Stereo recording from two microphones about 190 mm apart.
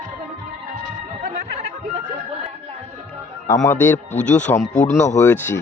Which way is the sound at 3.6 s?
10° left (ahead or behind).